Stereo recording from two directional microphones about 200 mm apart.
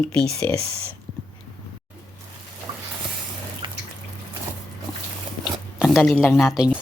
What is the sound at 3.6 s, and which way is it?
Water, 25° right (ahead or behind).